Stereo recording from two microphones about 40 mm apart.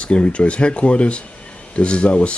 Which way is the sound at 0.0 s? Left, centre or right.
Left.